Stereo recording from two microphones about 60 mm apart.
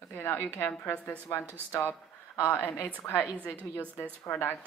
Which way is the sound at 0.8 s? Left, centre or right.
Left.